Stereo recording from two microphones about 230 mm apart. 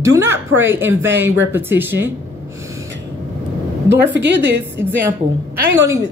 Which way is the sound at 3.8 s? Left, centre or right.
Right.